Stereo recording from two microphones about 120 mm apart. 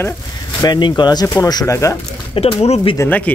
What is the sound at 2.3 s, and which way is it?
Speech, 50° left (ahead or behind).